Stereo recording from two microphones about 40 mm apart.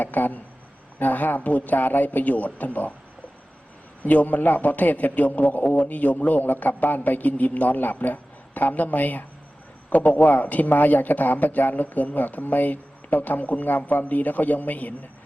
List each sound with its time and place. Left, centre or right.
0.0 s speech: left
4.0 s speech: left
5.6 s speech: left
9.9 s a man's voice: left
10.2 s speech: left